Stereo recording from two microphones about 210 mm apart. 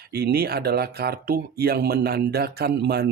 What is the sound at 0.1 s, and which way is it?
Speech, 50° right (ahead or behind).